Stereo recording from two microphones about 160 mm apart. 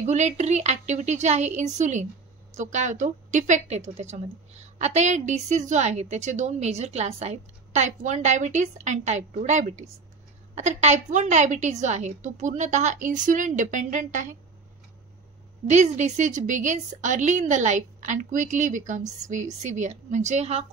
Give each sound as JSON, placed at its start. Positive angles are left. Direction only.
{"t": 0.0, "sound": "a woman's voice", "side_deg": -45}
{"t": 15.6, "sound": "a woman's voice", "side_deg": -45}